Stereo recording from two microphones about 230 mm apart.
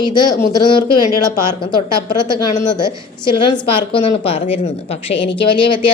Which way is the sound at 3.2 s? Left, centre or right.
Left.